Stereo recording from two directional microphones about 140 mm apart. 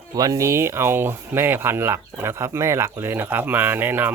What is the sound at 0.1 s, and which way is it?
Speech, 25° right (ahead or behind).